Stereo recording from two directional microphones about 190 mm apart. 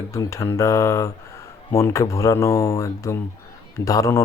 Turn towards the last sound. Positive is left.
turn(degrees=15)  # may be behind; listen again after turning